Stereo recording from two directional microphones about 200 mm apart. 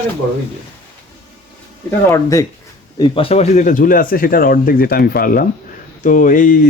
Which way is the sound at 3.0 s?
25° left (ahead or behind).